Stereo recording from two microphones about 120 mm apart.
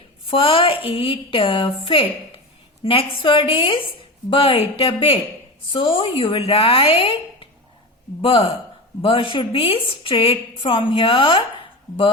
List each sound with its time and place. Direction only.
0.3 s a woman's voice: 50° left (ahead or behind)